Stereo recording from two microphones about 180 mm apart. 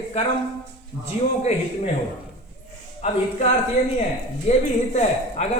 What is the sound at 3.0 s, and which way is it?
A man's voice, 35° left (ahead or behind).